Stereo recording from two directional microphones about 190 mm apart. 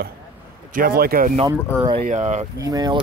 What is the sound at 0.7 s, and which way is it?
Speech, 55° right (ahead or behind).